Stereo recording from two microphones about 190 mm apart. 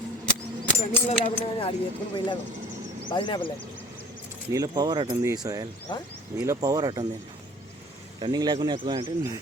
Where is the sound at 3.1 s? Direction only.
25° left (ahead or behind).